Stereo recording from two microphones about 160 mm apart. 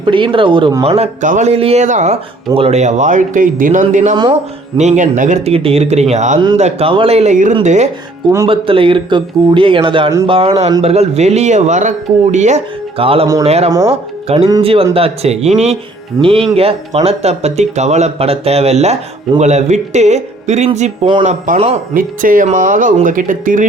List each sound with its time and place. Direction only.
0.0 s speech: 30° right (ahead or behind); by 5.4 s 50° right (ahead or behind)
5.5 s speech: 35° right (ahead or behind)
8.4 s speech: 35° right (ahead or behind)
13.7 s speech: 20° right (ahead or behind)
14.3 s speech: 40° right (ahead or behind)
16.1 s speech: 20° right (ahead or behind)
16.6 s speech: 40° right (ahead or behind)
21.2 s speech: 55° right (ahead or behind)